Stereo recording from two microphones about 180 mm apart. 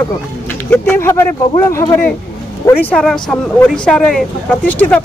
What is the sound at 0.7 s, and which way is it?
Speech, 15° left (ahead or behind).